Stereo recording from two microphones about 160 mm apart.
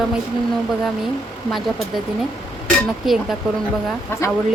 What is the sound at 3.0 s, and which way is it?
Speech, centre (ahead or behind).